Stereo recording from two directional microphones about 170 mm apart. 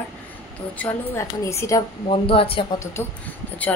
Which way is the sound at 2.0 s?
30° left (ahead or behind).